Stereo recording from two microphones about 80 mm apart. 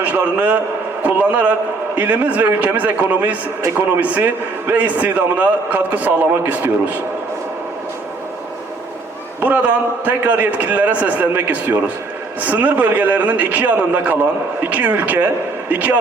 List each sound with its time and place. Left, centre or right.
0.0 s a man's voice: centre
9.4 s a man's voice: centre